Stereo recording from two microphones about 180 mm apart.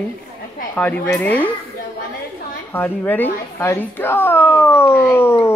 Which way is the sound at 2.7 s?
10° left (ahead or behind).